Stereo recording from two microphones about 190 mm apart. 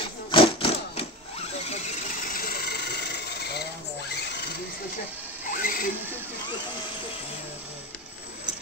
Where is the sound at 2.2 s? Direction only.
50° left (ahead or behind).